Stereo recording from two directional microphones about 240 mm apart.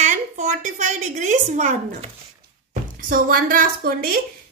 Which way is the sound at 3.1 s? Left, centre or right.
Right.